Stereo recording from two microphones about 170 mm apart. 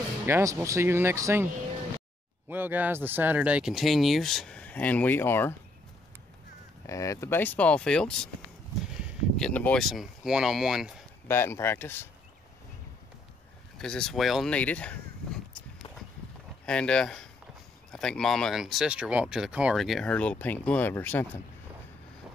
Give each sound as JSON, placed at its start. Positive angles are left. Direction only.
{"t": 0.3, "sound": "speech", "side_deg": -15}
{"t": 6.9, "sound": "speech", "side_deg": 20}
{"t": 8.8, "sound": "a sound", "side_deg": -5}
{"t": 9.5, "sound": "speech", "side_deg": 10}
{"t": 11.2, "sound": "speech", "side_deg": 15}
{"t": 13.7, "sound": "speech", "side_deg": 5}
{"t": 16.6, "sound": "speech", "side_deg": 5}